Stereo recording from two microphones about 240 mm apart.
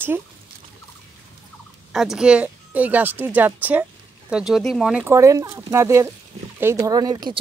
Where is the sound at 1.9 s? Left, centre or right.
Centre.